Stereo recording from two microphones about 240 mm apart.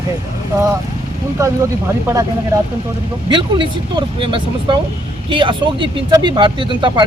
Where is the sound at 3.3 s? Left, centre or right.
Centre.